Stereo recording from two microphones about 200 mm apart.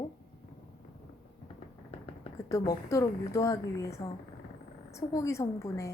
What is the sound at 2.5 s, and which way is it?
A woman's voice, 15° left (ahead or behind).